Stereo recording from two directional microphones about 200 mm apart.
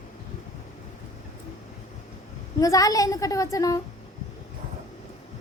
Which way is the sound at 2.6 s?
15° left (ahead or behind).